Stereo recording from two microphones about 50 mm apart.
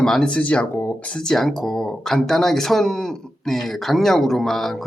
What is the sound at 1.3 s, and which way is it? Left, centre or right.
A man's voice, centre.